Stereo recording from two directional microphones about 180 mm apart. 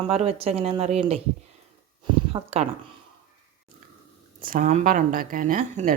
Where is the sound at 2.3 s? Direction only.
35° right (ahead or behind).